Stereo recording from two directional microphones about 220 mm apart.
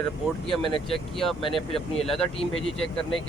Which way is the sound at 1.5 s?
Centre (ahead or behind).